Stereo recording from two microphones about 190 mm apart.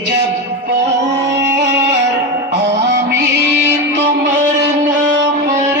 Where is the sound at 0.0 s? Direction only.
65° right (ahead or behind).